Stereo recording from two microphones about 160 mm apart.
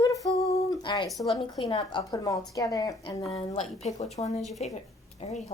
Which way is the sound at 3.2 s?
35° left (ahead or behind).